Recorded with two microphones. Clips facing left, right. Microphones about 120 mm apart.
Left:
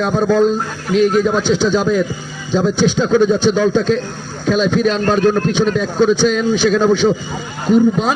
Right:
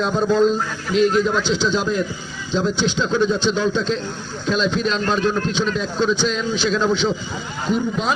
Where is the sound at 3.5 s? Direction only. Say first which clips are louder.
Left 6 dB; 55° left (ahead or behind).